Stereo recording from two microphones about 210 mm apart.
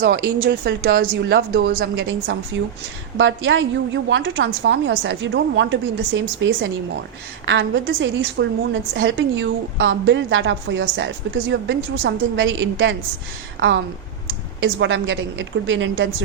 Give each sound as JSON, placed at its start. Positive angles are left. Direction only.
{"t": 0.5, "sound": "a woman's voice", "side_deg": -50}